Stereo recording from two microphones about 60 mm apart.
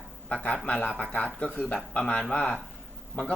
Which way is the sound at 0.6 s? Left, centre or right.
Centre.